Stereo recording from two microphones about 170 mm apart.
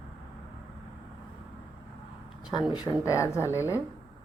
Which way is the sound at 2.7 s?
20° left (ahead or behind).